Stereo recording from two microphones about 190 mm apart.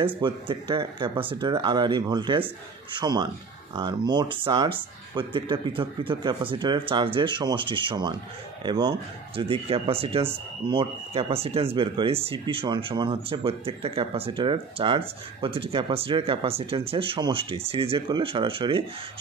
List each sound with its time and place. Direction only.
0.2 s speech: 25° right (ahead or behind)